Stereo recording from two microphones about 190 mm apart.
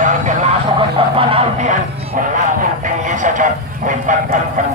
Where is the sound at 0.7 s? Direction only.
30° right (ahead or behind).